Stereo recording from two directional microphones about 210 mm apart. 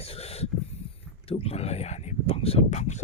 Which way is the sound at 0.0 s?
30° left (ahead or behind).